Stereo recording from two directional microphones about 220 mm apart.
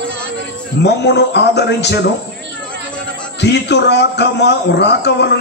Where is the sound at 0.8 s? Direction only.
50° left (ahead or behind).